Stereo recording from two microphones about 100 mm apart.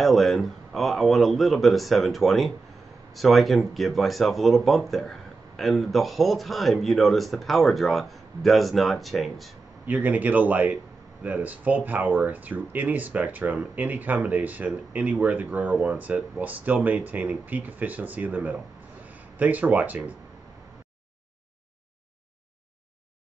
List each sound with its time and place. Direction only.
0.0 s speech: centre (ahead or behind)
9.8 s speech: 15° right (ahead or behind)